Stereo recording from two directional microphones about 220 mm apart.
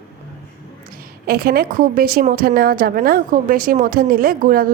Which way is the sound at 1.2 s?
45° right (ahead or behind).